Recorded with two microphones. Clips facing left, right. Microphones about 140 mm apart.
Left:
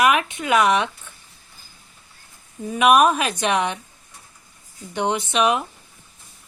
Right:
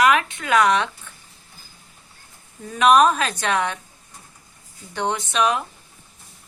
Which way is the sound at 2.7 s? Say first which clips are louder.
Even; 10° left (ahead or behind).